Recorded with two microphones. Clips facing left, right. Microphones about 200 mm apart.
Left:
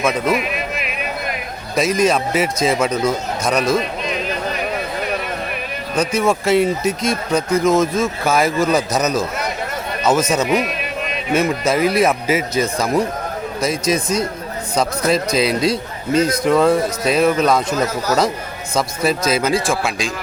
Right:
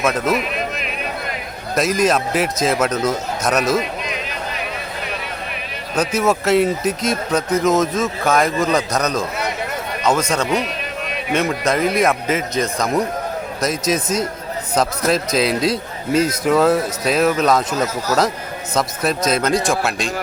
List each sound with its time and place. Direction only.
0.0 s speech: centre (ahead or behind)
1.7 s speech: centre (ahead or behind)
6.0 s speech: 5° right (ahead or behind)
10.4 s speech: 15° left (ahead or behind)
11.3 s speech: centre (ahead or behind)